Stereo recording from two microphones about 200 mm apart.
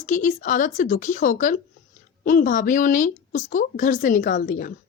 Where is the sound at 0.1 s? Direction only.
40° left (ahead or behind).